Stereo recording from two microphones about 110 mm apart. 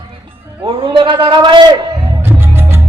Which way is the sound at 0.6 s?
50° right (ahead or behind).